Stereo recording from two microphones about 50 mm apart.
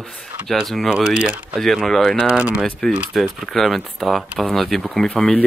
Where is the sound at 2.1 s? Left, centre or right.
Centre.